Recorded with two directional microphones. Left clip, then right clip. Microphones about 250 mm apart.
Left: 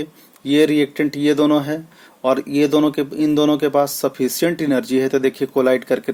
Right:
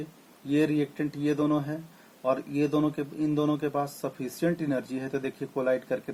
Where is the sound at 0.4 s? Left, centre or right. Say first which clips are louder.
Left 11 dB; left.